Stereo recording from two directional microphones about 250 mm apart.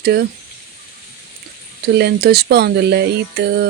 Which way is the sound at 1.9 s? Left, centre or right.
Right.